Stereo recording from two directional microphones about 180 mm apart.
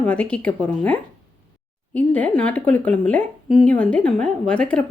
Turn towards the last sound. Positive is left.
turn(degrees=5)  # may be behind; listen again after turning